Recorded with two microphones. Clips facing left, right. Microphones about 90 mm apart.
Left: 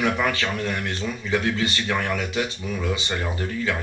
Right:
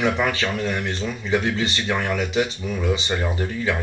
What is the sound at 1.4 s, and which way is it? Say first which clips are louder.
Speech: right 1 dB; 15° right (ahead or behind).